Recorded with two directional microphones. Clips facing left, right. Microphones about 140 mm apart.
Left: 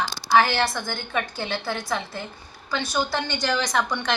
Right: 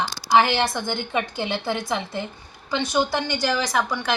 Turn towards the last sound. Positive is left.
turn(degrees=-5)  # may be behind; listen again after turning